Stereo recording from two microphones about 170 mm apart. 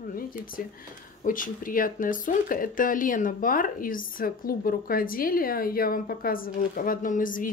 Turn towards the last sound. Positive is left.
turn(degrees=55)  # may be behind; listen again after turning